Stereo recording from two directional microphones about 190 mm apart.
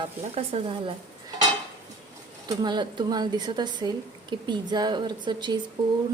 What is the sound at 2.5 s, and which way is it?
Speech, 25° right (ahead or behind).